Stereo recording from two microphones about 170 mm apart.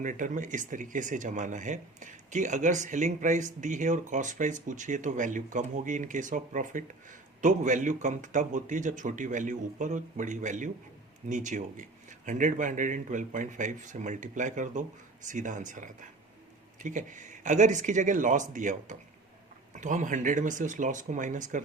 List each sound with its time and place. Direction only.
0.0 s speech: 50° right (ahead or behind)